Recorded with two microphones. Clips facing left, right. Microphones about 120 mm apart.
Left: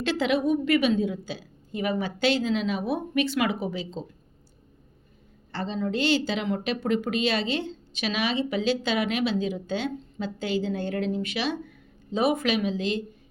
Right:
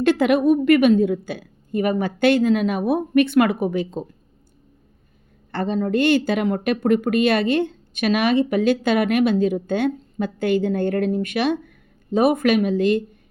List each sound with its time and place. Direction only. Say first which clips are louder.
0.0 s a woman's voice: right 8 dB; 55° right (ahead or behind)
5.5 s a woman's voice: right 7 dB; 55° right (ahead or behind)